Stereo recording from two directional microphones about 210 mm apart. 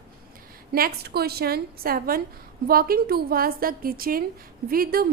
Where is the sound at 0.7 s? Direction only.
45° right (ahead or behind).